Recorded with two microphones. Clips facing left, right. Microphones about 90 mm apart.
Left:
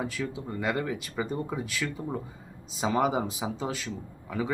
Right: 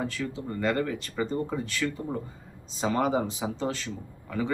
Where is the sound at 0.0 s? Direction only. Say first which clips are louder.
Right 1 dB; 5° left (ahead or behind).